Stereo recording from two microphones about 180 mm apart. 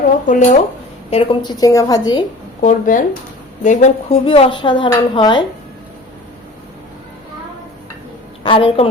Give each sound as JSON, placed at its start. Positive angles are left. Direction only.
{"t": 0.3, "sound": "speech", "side_deg": 40}
{"t": 1.1, "sound": "a woman's voice", "side_deg": 25}
{"t": 2.6, "sound": "a woman's voice", "side_deg": 45}
{"t": 8.4, "sound": "a woman's voice", "side_deg": 30}